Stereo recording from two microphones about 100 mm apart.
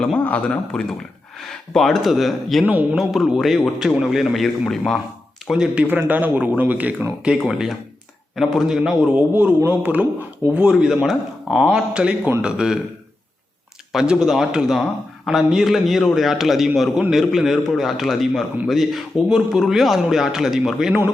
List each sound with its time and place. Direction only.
0.0 s a man's voice: 10° left (ahead or behind); by 5.8 s 5° right (ahead or behind)
5.9 s a man's voice: 20° right (ahead or behind)
7.3 s a man's voice: centre (ahead or behind)
9.1 s a man's voice: 15° right (ahead or behind)
13.9 s a man's voice: 5° right (ahead or behind)